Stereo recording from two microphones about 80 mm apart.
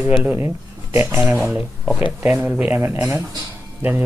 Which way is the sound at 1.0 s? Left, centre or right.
Centre.